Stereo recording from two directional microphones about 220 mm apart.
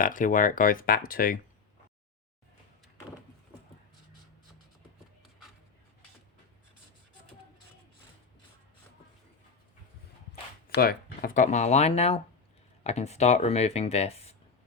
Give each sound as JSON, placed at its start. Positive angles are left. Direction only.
{"t": 0.0, "sound": "speech", "side_deg": 35}
{"t": 10.7, "sound": "speech", "side_deg": 40}